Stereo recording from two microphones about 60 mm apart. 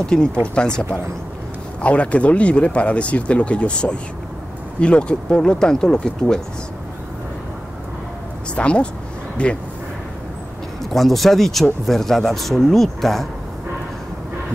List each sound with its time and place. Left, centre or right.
0.0 s speech: centre
8.5 s speech: centre
10.8 s speech: centre